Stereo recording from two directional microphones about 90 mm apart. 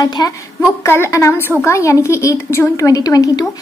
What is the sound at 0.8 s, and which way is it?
A woman's voice, 30° left (ahead or behind).